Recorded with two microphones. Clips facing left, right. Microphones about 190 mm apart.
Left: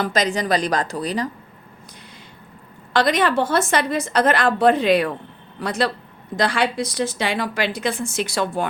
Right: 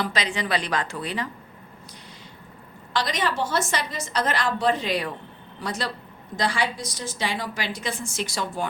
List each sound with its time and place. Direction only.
0.0 s a woman's voice: 45° left (ahead or behind)
2.9 s a woman's voice: 55° left (ahead or behind)